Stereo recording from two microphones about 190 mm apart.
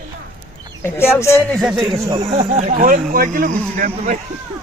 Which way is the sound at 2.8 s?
50° right (ahead or behind).